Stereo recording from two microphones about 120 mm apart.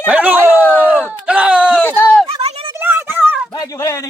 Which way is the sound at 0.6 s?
15° left (ahead or behind).